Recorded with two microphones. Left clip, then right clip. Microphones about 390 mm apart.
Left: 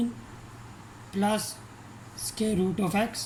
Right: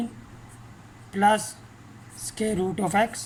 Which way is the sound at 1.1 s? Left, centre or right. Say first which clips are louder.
Right 8 dB; centre.